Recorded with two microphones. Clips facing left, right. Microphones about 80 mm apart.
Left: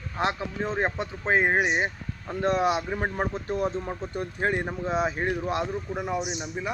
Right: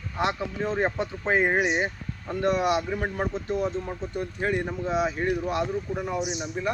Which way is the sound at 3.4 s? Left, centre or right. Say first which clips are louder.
Even; left.